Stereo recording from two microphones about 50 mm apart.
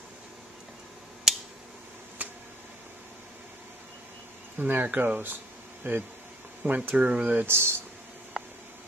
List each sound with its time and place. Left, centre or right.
1.3 s a sound: centre
2.2 s a sound: right
4.6 s speech: right
5.8 s speech: right
6.6 s speech: right
7.0 s speech: centre
7.4 s speech: right